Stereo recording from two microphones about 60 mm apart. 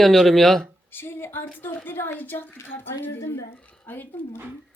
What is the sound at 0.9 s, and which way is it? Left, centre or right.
A woman's voice, left.